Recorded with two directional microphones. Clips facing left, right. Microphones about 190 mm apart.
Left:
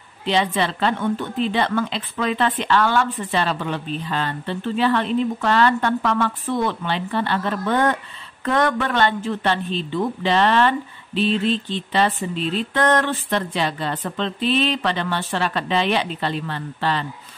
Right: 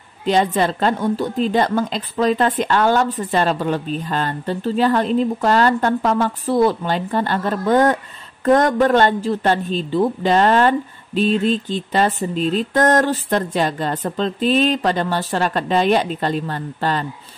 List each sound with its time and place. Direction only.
0.2 s a woman's voice: 45° right (ahead or behind)